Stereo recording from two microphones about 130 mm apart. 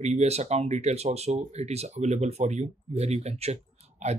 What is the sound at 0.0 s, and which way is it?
Speech, 60° right (ahead or behind).